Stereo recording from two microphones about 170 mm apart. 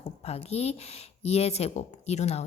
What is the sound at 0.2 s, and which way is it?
Speech, 35° left (ahead or behind).